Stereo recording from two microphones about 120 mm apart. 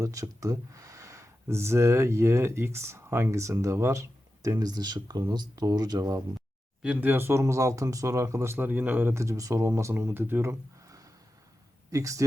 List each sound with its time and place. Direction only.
0.0 s speech: 30° right (ahead or behind)
6.8 s speech: 10° right (ahead or behind); by 12.2 s 25° right (ahead or behind)